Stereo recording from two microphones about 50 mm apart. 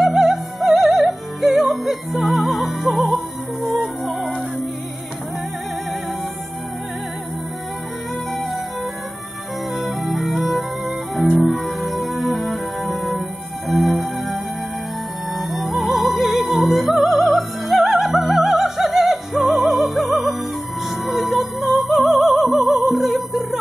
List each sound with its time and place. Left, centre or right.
0.0 s music: centre
9.8 s music: centre